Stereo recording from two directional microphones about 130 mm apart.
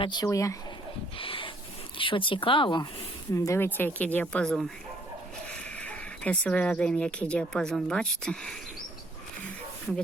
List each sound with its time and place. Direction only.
0.0 s speech: 30° left (ahead or behind)
1.2 s a sound: 45° left (ahead or behind)
2.0 s speech: 40° left (ahead or behind)
3.3 s a woman's voice: 25° left (ahead or behind); by 8.5 s 5° left (ahead or behind)